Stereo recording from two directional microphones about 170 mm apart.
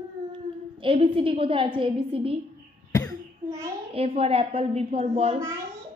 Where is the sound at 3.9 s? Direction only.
35° right (ahead or behind).